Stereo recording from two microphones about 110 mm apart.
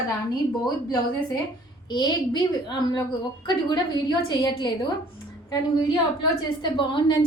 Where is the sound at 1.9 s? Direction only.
40° left (ahead or behind).